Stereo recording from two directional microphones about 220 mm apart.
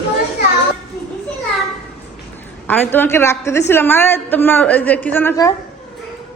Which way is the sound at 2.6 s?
10° left (ahead or behind).